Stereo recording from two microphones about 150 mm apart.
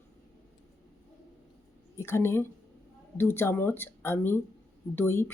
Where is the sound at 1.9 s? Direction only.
15° left (ahead or behind).